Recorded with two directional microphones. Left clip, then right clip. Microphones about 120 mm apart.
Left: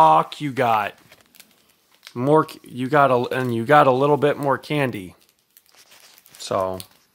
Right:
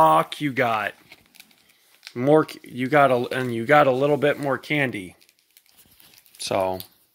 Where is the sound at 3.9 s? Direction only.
40° left (ahead or behind).